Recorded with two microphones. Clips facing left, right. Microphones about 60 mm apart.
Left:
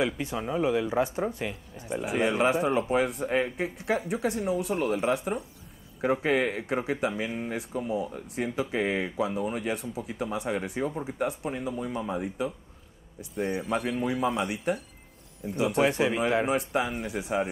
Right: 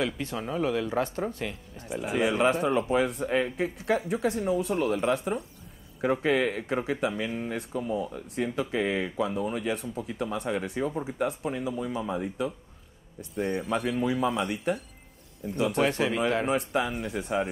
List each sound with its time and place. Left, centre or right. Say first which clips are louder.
0.0 s speech: left 2 dB; centre
16.4 s speech: even; centre